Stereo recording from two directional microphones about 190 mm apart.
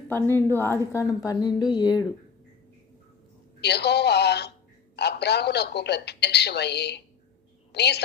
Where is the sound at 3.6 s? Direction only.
60° left (ahead or behind).